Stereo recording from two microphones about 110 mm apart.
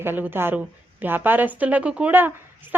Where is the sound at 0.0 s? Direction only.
20° right (ahead or behind).